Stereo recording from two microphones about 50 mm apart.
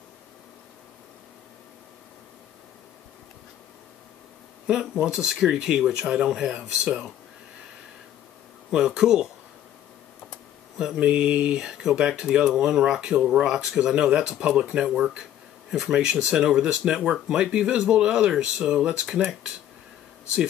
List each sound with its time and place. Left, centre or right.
5.1 s speech: centre
8.7 s speech: centre
11.0 s speech: right